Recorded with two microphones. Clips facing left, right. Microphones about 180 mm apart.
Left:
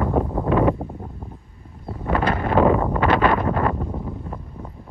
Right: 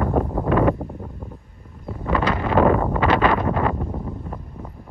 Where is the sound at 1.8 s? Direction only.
30° left (ahead or behind).